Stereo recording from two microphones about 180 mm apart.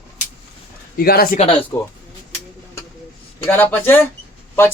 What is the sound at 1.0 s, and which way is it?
Speech, 55° left (ahead or behind).